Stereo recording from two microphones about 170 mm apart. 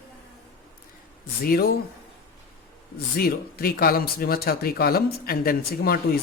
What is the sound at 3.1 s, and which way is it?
Speech, 65° left (ahead or behind).